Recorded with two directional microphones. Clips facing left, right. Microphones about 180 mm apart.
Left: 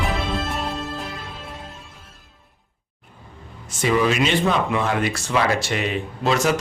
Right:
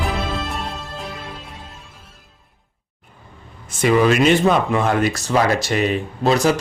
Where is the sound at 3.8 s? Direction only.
50° right (ahead or behind).